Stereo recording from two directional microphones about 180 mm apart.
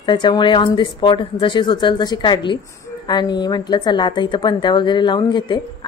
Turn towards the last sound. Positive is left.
turn(degrees=25)  # may be behind; listen again after turning